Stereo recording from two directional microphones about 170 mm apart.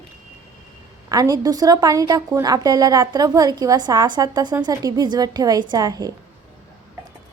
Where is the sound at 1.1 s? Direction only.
20° right (ahead or behind).